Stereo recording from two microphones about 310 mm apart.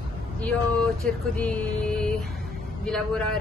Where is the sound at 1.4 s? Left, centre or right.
Centre.